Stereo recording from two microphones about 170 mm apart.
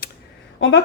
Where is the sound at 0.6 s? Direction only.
90° left.